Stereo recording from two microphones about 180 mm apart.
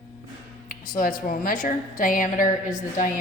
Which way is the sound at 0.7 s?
50° left (ahead or behind).